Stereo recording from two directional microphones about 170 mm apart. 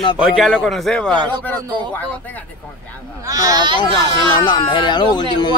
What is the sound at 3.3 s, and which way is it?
Speech, 20° right (ahead or behind).